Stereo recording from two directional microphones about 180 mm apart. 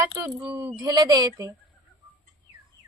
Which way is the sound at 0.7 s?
25° right (ahead or behind).